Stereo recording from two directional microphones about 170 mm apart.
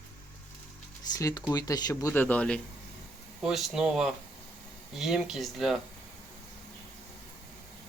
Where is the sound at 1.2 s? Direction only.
20° left (ahead or behind).